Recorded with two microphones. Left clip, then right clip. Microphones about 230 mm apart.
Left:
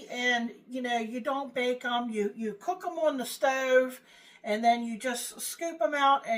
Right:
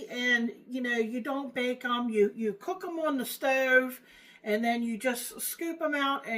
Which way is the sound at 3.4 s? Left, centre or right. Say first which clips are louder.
Even; centre.